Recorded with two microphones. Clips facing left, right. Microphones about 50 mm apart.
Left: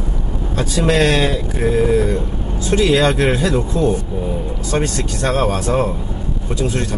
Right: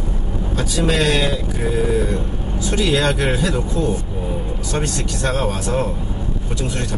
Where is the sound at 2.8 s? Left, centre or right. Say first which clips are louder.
Left 4 dB; left.